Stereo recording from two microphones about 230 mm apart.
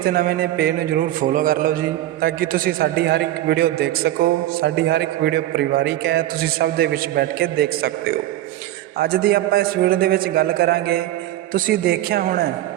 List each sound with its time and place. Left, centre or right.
0.0 s a man's voice: right